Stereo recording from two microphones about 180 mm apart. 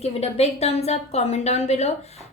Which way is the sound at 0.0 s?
35° left (ahead or behind).